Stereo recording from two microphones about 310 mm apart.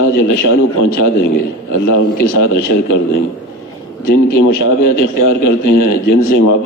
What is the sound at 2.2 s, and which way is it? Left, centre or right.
A man's voice, left.